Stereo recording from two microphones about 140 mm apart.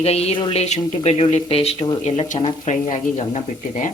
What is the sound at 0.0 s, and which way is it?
Speech, 45° left (ahead or behind).